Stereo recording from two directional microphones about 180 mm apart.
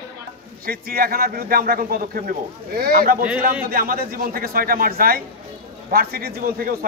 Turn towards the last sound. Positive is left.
turn(degrees=-55)  # may be behind; listen again after turning